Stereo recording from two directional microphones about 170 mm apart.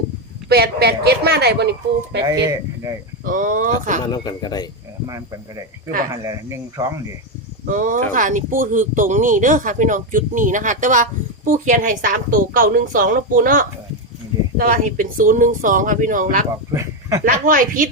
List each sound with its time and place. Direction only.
0.4 s a woman's voice: 65° right (ahead or behind)
2.2 s speech: 20° right (ahead or behind)
3.2 s speech: 50° right (ahead or behind)
4.0 s a man's voice: 25° left (ahead or behind)
5.0 s speech: 20° right (ahead or behind)
7.7 s speech: 50° right (ahead or behind)